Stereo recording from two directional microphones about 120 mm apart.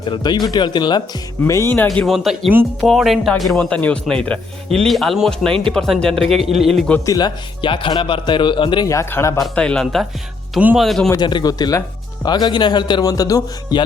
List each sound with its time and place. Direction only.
0.1 s speech: 35° left (ahead or behind); by 1.9 s 20° left (ahead or behind)
1.9 s speech: centre (ahead or behind)
7.0 s speech: 30° left (ahead or behind)
8.9 s speech: 20° left (ahead or behind)
9.4 s speech: 10° left (ahead or behind)
11.2 s speech: 40° left (ahead or behind)